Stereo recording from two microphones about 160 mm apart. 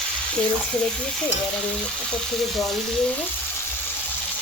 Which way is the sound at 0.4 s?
5° left (ahead or behind).